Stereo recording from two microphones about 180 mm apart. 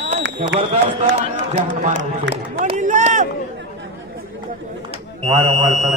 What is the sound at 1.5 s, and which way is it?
Speech, 40° right (ahead or behind).